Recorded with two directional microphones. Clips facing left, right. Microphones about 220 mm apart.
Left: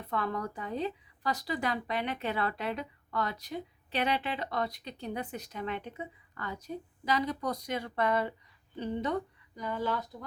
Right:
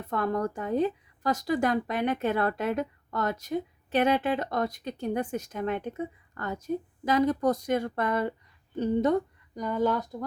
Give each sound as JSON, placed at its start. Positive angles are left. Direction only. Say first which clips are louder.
{"t": 0.0, "sound": "a woman's voice", "louder": "right 6 dB", "side_deg": -45}